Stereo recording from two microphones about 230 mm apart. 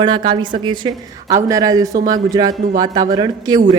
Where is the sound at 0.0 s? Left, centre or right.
Centre.